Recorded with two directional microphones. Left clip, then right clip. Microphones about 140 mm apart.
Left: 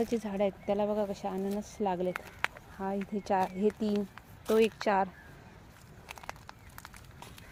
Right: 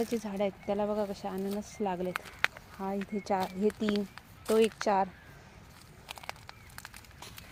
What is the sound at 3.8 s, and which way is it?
Speech, 15° right (ahead or behind).